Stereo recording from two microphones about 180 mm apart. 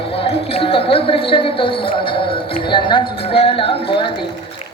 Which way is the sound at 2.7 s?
25° left (ahead or behind).